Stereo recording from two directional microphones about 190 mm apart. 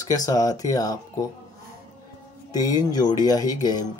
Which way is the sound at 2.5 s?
20° left (ahead or behind).